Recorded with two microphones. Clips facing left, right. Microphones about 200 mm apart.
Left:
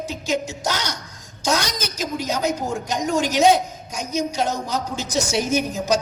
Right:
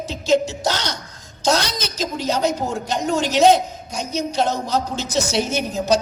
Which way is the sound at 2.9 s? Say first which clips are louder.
Even; 10° left (ahead or behind).